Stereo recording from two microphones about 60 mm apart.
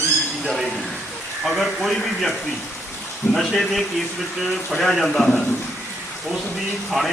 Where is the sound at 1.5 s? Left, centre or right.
Centre.